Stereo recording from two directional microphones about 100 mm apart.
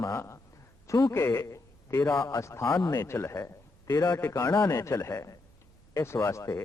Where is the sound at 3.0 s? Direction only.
25° left (ahead or behind).